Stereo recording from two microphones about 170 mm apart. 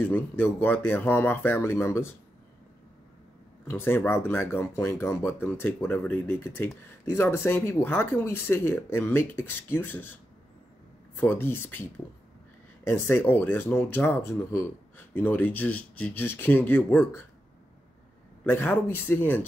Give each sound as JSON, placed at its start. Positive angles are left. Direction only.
{"t": 0.0, "sound": "speech", "side_deg": 10}
{"t": 3.7, "sound": "speech", "side_deg": 10}
{"t": 11.1, "sound": "speech", "side_deg": 10}
{"t": 18.4, "sound": "speech", "side_deg": 10}